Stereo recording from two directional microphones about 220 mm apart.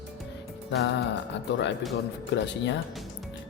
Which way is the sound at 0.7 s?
55° left (ahead or behind).